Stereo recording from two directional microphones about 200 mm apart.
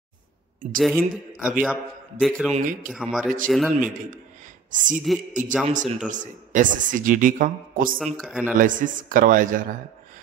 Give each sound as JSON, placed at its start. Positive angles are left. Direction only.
{"t": 0.7, "sound": "a man's voice", "side_deg": 0}
{"t": 2.5, "sound": "speech", "side_deg": -40}
{"t": 2.9, "sound": "a man's voice", "side_deg": -5}
{"t": 4.6, "sound": "a woman's voice", "side_deg": -40}
{"t": 8.0, "sound": "a man's voice", "side_deg": 0}
{"t": 8.5, "sound": "speech", "side_deg": -40}